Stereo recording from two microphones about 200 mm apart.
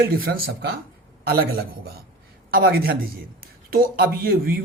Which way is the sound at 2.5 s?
45° right (ahead or behind).